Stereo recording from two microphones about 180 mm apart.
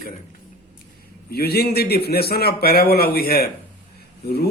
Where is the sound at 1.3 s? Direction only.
60° left (ahead or behind).